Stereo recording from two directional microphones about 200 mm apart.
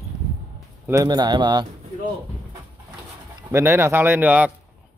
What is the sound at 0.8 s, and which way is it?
Speech, 15° right (ahead or behind).